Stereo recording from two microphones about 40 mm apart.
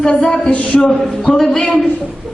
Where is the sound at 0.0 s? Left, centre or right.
Left.